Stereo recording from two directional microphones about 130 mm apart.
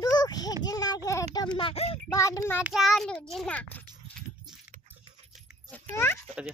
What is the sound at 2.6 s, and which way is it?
A child's voice, centre (ahead or behind).